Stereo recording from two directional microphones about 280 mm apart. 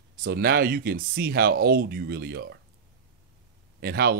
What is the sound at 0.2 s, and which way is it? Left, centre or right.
Speech, right.